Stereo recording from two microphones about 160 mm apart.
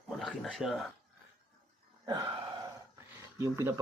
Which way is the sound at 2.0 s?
20° right (ahead or behind).